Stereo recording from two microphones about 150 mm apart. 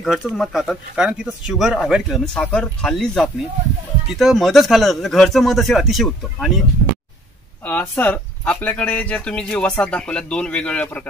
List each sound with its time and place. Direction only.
0.0 s speech: centre (ahead or behind)
7.6 s speech: 10° left (ahead or behind)